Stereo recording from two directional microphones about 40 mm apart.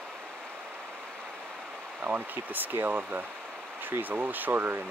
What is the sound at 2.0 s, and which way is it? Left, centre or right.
Speech, right.